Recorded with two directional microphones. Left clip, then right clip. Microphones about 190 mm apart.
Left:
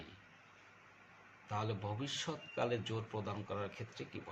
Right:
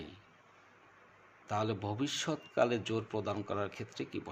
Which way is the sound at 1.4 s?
55° right (ahead or behind).